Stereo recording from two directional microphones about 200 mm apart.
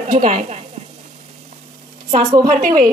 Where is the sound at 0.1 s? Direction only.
35° right (ahead or behind).